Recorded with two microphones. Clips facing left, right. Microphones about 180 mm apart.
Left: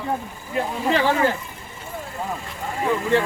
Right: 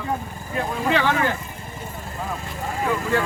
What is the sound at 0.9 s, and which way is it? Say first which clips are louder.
Speech: left 1 dB; 30° left (ahead or behind).